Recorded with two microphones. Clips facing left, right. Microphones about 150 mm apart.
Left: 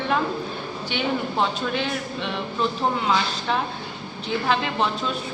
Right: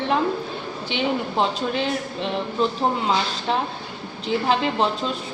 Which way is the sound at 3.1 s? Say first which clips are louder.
Right 1 dB; 30° right (ahead or behind).